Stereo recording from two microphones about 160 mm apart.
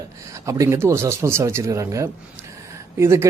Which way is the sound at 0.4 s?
20° right (ahead or behind).